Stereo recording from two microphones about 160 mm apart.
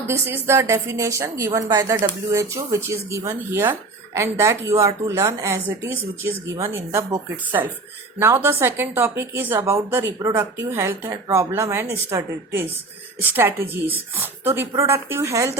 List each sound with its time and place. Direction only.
0.1 s a woman's voice: 15° right (ahead or behind)